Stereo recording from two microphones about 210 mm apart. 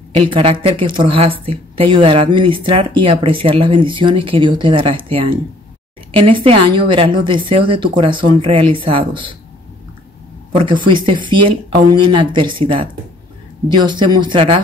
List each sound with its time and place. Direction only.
0.3 s speech: 25° right (ahead or behind)
10.5 s speech: 25° right (ahead or behind)